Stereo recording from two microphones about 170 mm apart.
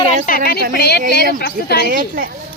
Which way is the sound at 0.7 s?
70° left (ahead or behind).